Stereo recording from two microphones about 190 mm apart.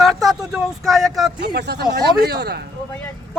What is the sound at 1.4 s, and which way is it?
Speech, 60° right (ahead or behind).